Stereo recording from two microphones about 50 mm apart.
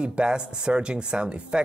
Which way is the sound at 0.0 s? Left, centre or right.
Right.